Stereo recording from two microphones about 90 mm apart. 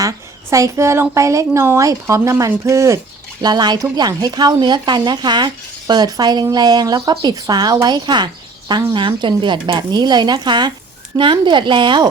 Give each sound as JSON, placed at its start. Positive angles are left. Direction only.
{"t": 0.5, "sound": "a woman's voice", "side_deg": -35}
{"t": 3.4, "sound": "speech", "side_deg": -50}
{"t": 11.2, "sound": "speech", "side_deg": -65}